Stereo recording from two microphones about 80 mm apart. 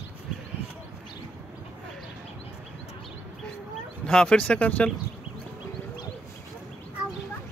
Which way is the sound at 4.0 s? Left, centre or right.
Centre.